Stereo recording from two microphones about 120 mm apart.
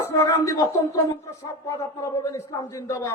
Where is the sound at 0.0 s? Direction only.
25° left (ahead or behind).